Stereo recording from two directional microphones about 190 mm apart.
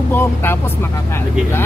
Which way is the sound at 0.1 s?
10° left (ahead or behind).